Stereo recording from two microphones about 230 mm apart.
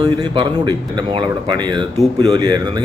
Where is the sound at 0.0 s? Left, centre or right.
Centre.